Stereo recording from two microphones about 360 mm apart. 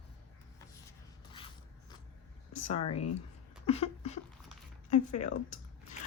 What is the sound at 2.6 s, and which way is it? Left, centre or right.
Speech, centre.